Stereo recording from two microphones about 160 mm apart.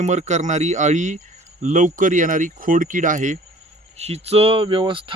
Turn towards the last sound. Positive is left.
turn(degrees=-30)  # may be behind; listen again after turning